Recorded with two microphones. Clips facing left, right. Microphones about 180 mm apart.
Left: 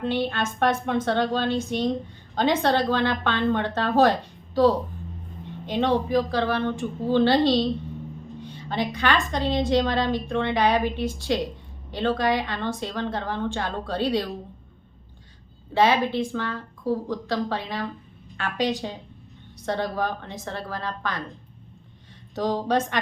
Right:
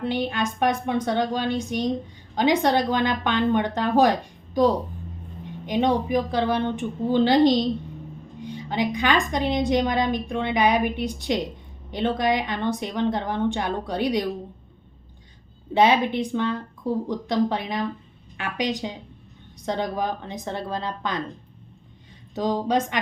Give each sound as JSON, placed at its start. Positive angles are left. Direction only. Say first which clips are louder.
{"t": 0.0, "sound": "a woman's voice", "louder": "even", "side_deg": -15}
{"t": 15.7, "sound": "a woman's voice", "louder": "right 2 dB", "side_deg": -20}
{"t": 22.4, "sound": "a woman's voice", "louder": "right 1 dB", "side_deg": -15}